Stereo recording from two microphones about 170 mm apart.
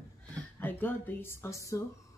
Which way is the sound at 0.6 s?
10° left (ahead or behind).